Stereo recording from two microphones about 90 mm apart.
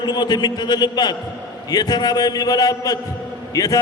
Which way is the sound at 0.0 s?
50° left (ahead or behind).